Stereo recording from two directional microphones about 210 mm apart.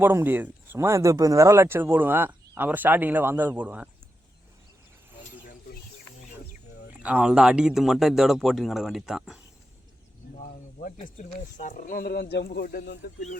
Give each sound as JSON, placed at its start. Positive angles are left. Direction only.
{"t": 0.0, "sound": "speech", "side_deg": -10}
{"t": 7.0, "sound": "speech", "side_deg": -5}
{"t": 10.9, "sound": "speech", "side_deg": 35}